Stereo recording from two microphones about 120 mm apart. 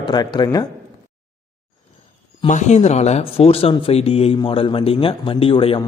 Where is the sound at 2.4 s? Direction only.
85° left; by 5.8 s 50° left (ahead or behind).